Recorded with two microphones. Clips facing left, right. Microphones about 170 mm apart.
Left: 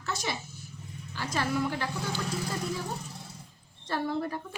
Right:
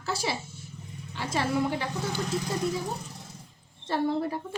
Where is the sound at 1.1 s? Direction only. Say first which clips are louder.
Right 2 dB; 25° right (ahead or behind).